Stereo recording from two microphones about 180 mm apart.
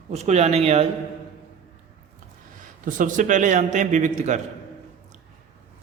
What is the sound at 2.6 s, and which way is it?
A man's voice, 45° right (ahead or behind).